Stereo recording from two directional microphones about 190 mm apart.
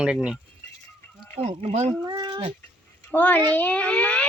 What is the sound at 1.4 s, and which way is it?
Speech, 35° right (ahead or behind).